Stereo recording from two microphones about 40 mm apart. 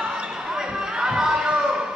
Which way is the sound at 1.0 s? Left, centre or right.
Centre.